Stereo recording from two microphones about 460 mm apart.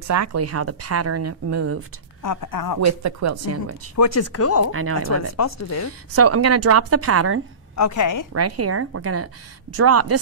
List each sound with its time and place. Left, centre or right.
0.0 s a woman's voice: right
2.2 s a woman's voice: left
2.8 s a woman's voice: right
3.9 s speech: left
6.1 s a woman's voice: right
7.7 s speech: left
8.3 s a woman's voice: right